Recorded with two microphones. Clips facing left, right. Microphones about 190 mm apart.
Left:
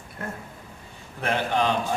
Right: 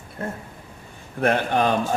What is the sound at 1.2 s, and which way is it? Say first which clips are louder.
Speech: right 4 dB; 50° right (ahead or behind).